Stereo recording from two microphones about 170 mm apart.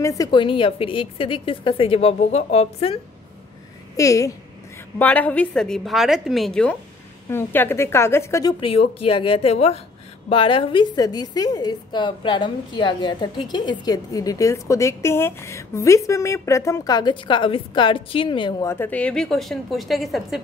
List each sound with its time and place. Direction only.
0.0 s a woman's voice: 20° left (ahead or behind); by 3.0 s 35° left (ahead or behind)
3.9 s a woman's voice: 20° left (ahead or behind)
18.6 s a woman's voice: 15° left (ahead or behind)